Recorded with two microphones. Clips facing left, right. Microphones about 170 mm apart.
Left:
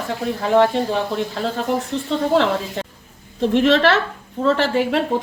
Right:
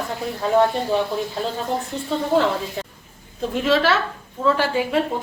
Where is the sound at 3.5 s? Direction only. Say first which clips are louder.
Left 4 dB; 75° left (ahead or behind).